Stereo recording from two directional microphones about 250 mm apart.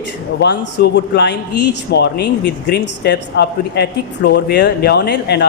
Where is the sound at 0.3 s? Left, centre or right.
Left.